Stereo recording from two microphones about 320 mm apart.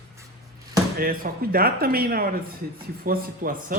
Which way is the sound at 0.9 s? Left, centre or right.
Right.